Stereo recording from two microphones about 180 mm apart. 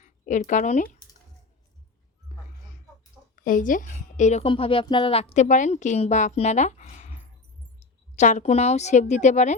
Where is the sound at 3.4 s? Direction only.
45° left (ahead or behind).